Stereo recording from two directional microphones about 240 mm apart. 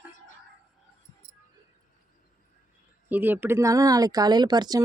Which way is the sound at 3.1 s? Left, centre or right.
Centre.